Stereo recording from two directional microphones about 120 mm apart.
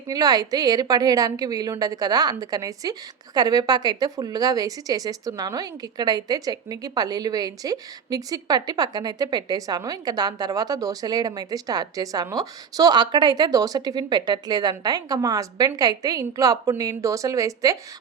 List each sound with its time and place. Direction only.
0.1 s a woman's voice: 30° right (ahead or behind)